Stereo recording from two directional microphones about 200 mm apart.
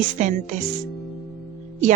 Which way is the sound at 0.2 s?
40° right (ahead or behind).